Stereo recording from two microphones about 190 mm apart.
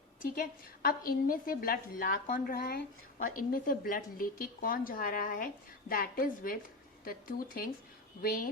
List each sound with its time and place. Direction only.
0.2 s a woman's voice: 50° left (ahead or behind)